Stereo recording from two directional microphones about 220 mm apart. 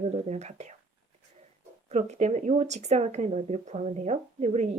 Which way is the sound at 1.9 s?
30° right (ahead or behind).